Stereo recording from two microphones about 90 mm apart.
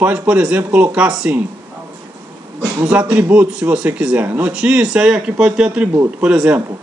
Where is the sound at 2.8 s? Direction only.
15° right (ahead or behind).